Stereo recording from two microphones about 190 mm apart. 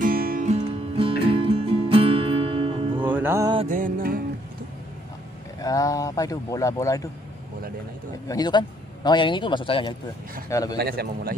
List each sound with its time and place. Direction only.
0.0 s music: 50° right (ahead or behind)
0.5 s music: 30° right (ahead or behind)
3.0 s music: 10° right (ahead or behind)
3.6 s music: 45° right (ahead or behind)
5.6 s speech: 20° left (ahead or behind)
8.3 s a man's voice: 20° left (ahead or behind)
10.8 s a man's voice: 55° right (ahead or behind)